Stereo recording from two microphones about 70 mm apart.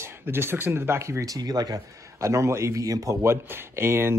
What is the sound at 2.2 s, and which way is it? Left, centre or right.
Speech, right.